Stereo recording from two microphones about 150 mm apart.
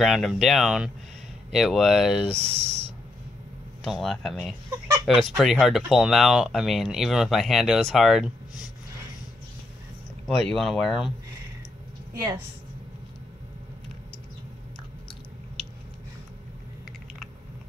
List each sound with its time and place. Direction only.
0.0 s speech: centre (ahead or behind)
2.3 s speech: 45° right (ahead or behind)
3.8 s speech: centre (ahead or behind)
10.2 s speech: centre (ahead or behind)